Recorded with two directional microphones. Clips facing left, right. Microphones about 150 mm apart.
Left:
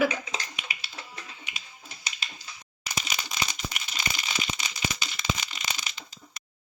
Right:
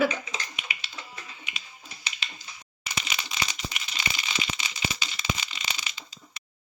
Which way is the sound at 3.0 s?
40° left (ahead or behind).